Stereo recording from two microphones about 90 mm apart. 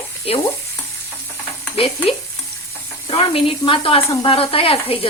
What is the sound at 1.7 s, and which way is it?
Speech, 90° left.